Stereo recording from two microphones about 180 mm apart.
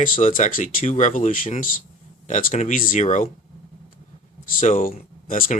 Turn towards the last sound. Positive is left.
turn(degrees=50)  # may be behind; listen again after turning